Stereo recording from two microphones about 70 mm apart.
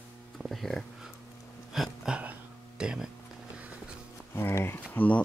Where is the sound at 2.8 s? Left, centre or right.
Centre.